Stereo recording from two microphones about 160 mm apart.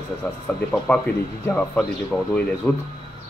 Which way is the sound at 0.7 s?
10° left (ahead or behind).